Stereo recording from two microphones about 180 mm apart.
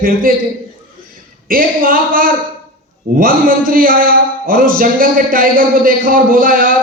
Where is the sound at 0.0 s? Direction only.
50° right (ahead or behind).